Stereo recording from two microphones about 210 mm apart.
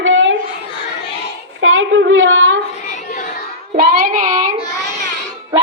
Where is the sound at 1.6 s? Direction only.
70° right (ahead or behind).